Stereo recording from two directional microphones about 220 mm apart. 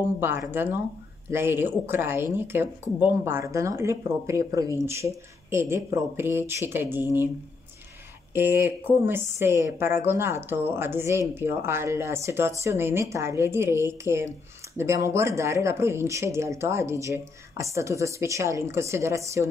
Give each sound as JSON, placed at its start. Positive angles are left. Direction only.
{"t": 0.2, "sound": "a woman's voice", "side_deg": -10}
{"t": 8.4, "sound": "a woman's voice", "side_deg": -10}